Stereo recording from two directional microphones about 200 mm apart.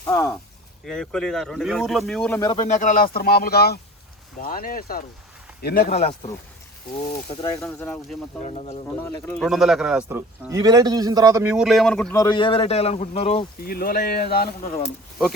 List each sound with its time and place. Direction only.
0.0 s speech: 15° left (ahead or behind)
0.9 s speech: 5° left (ahead or behind)
2.4 s a man's voice: 25° left (ahead or behind)
2.6 s speech: 40° left (ahead or behind)
5.9 s speech: 30° left (ahead or behind)
7.6 s speech: 10° left (ahead or behind)
8.4 s speech: 35° left (ahead or behind)
9.2 s a man's voice: centre (ahead or behind); by 11.5 s 15° right (ahead or behind)
11.5 s speech: centre (ahead or behind)
12.1 s a man's voice: 20° left (ahead or behind)
13.6 s speech: 50° left (ahead or behind)